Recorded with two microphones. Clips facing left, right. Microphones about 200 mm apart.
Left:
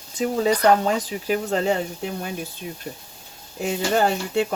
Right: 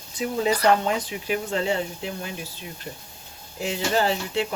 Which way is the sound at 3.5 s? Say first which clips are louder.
Left 3 dB; 50° left (ahead or behind).